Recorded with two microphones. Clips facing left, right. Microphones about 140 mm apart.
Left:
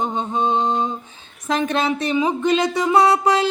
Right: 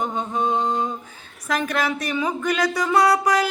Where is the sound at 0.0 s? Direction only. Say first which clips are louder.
Left 2 dB; 20° left (ahead or behind).